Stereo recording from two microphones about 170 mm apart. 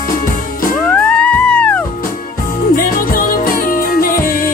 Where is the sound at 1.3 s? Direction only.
5° left (ahead or behind).